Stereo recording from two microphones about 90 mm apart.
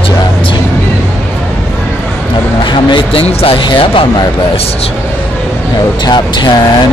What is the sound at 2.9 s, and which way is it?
Speech, 90° left.